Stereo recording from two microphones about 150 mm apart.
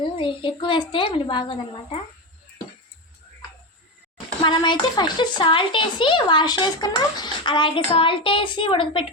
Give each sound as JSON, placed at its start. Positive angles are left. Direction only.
{"t": 0.2, "sound": "a woman's voice", "side_deg": 35}
{"t": 4.4, "sound": "a woman's voice", "side_deg": 30}